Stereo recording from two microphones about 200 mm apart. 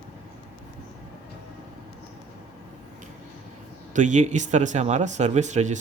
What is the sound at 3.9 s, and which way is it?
Speech, 35° right (ahead or behind).